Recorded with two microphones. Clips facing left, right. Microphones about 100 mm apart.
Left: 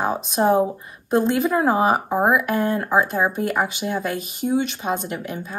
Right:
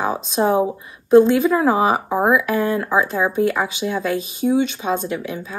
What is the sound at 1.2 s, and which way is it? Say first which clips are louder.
Speech: right 3 dB; 45° left (ahead or behind).